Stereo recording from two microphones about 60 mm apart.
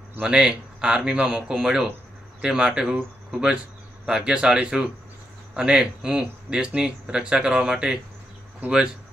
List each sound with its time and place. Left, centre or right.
0.2 s speech: centre